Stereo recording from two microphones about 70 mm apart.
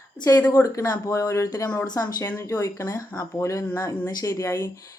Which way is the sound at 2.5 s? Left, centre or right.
Left.